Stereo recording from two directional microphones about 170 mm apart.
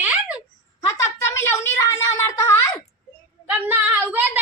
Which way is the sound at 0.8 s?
20° left (ahead or behind).